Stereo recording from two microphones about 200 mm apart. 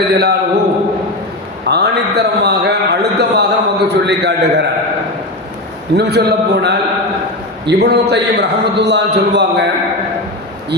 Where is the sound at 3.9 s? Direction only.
60° right (ahead or behind).